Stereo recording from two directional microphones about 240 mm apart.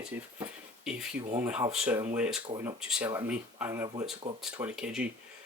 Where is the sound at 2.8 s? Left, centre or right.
Centre.